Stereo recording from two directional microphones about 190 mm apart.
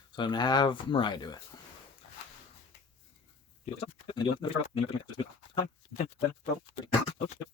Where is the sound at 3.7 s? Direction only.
30° left (ahead or behind).